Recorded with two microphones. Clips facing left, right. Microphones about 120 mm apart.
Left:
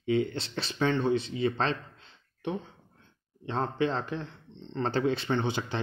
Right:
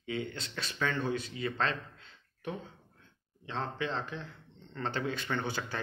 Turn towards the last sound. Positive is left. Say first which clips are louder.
# left 6 dB
turn(degrees=20)  # may be behind; listen again after turning